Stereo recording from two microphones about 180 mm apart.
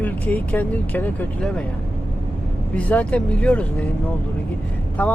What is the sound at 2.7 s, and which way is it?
Speech, 5° left (ahead or behind).